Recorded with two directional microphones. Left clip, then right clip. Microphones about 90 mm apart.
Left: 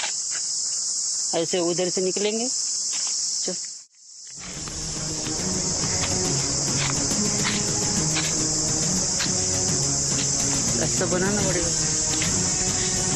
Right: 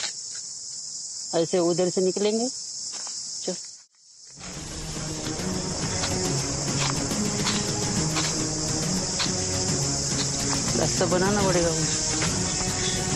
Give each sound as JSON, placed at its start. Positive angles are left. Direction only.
{"t": 1.3, "sound": "cricket", "side_deg": -30}
{"t": 5.4, "sound": "a sound", "side_deg": 0}
{"t": 6.9, "sound": "music", "side_deg": 0}
{"t": 11.2, "sound": "speech", "side_deg": 0}
{"t": 12.3, "sound": "music", "side_deg": 0}